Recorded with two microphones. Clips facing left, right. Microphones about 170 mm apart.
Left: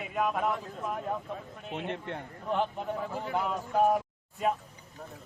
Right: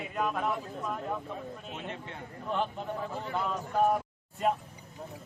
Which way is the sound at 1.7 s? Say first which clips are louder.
Left 5 dB; 60° left (ahead or behind).